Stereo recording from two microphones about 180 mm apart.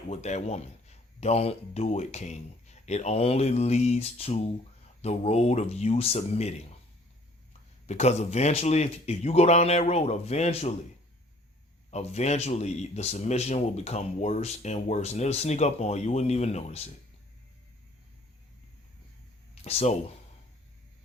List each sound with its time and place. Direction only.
0.1 s a man's voice: 40° left (ahead or behind)
7.9 s a man's voice: 40° left (ahead or behind)
11.9 s a man's voice: 40° left (ahead or behind)
19.6 s a man's voice: 35° left (ahead or behind)